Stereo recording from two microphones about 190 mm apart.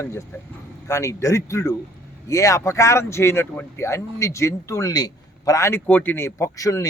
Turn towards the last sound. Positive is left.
turn(degrees=15)  # may be behind; listen again after turning